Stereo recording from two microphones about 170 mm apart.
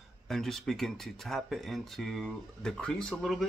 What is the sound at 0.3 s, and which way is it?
Speech, centre (ahead or behind).